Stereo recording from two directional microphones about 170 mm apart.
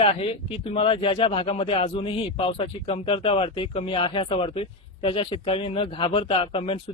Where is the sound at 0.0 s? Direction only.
35° left (ahead or behind).